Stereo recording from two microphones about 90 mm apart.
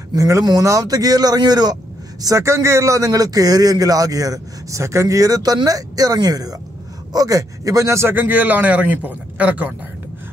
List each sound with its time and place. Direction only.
0.1 s speech: 40° right (ahead or behind)
2.2 s a man's voice: 35° right (ahead or behind); by 9.8 s 15° right (ahead or behind)